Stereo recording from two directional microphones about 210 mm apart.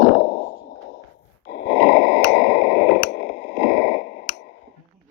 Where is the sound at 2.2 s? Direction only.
55° left (ahead or behind).